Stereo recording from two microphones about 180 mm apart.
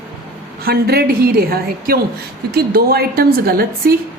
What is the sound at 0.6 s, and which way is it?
A woman's voice, 60° right (ahead or behind).